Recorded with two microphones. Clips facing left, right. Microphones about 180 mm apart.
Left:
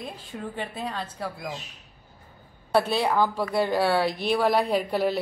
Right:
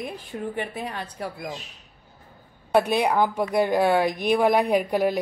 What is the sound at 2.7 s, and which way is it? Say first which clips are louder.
A woman's voice: right 2 dB; 15° right (ahead or behind).